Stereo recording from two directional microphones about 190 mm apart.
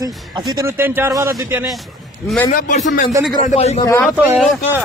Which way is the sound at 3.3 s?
30° left (ahead or behind).